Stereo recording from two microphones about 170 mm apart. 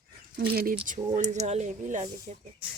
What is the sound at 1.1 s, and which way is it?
Speech, 40° right (ahead or behind).